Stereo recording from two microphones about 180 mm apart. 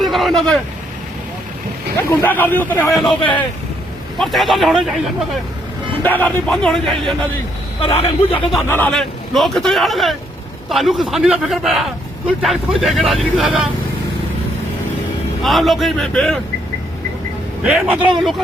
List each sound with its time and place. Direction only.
0.0 s vehicle: centre (ahead or behind)
2.0 s speech: 10° left (ahead or behind)
3.1 s speech: 25° left (ahead or behind)
4.2 s speech: centre (ahead or behind)
6.1 s speech: 10° left (ahead or behind)
7.8 s a man's voice: 30° left (ahead or behind)
8.7 s speech: 5° left (ahead or behind)
15.4 s speech: centre (ahead or behind)
17.6 s speech: 5° right (ahead or behind)